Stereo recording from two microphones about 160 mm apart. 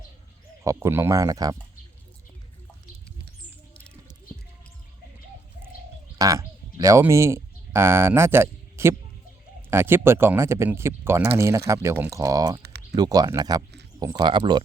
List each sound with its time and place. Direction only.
0.6 s speech: 20° right (ahead or behind)
6.1 s speech: 25° right (ahead or behind)